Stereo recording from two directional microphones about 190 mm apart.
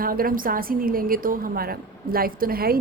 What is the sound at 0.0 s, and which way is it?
A woman's voice, 50° right (ahead or behind).